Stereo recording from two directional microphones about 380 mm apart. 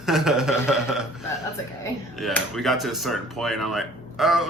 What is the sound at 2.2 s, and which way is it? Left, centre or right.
A woman's voice, centre.